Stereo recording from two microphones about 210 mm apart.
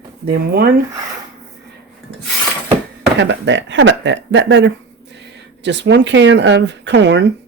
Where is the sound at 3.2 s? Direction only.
60° right (ahead or behind).